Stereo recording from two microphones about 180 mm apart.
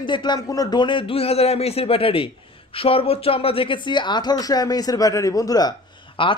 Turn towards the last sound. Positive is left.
turn(degrees=25)  # may be behind; listen again after turning